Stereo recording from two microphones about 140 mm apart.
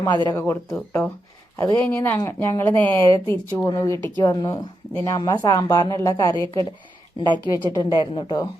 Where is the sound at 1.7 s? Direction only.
15° left (ahead or behind).